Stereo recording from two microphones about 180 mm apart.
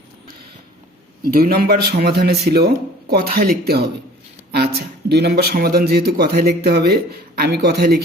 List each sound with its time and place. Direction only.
1.2 s speech: 55° right (ahead or behind)